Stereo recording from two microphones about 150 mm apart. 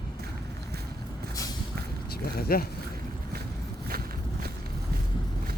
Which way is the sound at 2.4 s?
85° left.